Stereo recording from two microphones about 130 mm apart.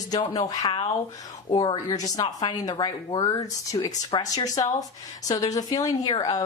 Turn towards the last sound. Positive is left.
turn(degrees=30)  # may be behind; listen again after turning